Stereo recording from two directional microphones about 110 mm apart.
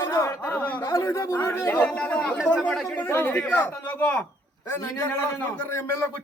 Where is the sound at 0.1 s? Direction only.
25° left (ahead or behind).